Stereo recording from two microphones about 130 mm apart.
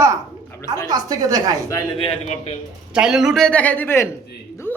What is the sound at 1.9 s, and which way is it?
Speech, 45° left (ahead or behind).